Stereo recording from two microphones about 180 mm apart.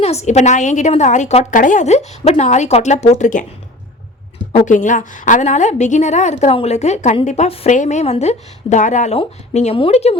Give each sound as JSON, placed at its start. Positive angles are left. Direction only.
{"t": 0.0, "sound": "a woman's voice", "side_deg": 35}
{"t": 4.5, "sound": "a woman's voice", "side_deg": 45}